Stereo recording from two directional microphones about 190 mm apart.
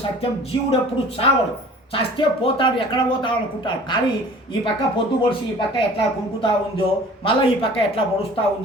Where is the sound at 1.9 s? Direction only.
30° left (ahead or behind).